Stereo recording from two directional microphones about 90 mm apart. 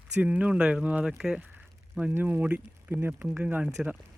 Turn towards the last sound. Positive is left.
turn(degrees=-15)  # may be behind; listen again after turning